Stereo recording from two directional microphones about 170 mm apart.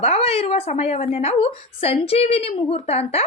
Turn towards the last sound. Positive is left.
turn(degrees=35)  # may be behind; listen again after turning